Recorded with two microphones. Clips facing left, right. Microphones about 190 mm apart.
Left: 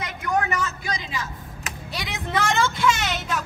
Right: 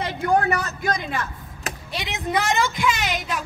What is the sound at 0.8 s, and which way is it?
Speech, 55° right (ahead or behind).